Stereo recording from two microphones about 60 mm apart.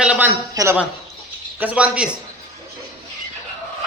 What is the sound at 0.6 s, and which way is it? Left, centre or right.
Speech, right.